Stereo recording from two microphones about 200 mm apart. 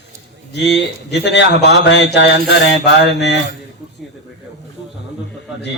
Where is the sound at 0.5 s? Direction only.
60° left (ahead or behind).